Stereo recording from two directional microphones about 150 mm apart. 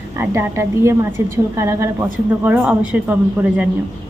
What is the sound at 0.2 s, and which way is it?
A woman's voice, 20° right (ahead or behind).